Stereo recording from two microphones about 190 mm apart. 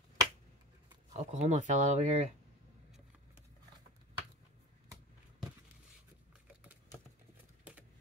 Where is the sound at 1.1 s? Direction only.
40° right (ahead or behind).